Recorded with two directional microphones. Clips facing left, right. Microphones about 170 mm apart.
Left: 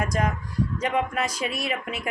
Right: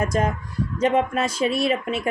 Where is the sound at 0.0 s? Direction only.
25° right (ahead or behind).